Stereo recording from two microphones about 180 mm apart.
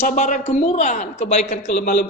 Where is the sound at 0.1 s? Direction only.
45° left (ahead or behind).